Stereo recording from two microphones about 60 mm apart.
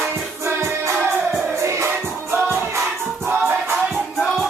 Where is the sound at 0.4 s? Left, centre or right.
Right.